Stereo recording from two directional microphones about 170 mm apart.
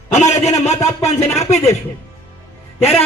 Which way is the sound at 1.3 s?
40° left (ahead or behind).